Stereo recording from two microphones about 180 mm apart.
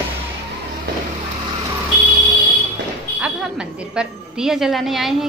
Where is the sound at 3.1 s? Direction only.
5° right (ahead or behind).